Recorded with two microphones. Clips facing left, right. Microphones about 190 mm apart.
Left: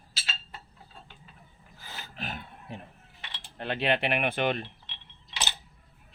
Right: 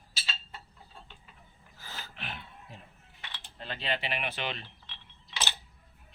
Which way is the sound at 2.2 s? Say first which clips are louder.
Left 7 dB; 45° left (ahead or behind).